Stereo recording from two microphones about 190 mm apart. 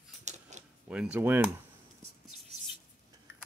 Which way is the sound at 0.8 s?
5° right (ahead or behind).